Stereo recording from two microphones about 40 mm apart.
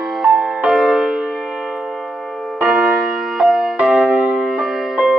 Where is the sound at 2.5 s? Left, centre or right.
Right.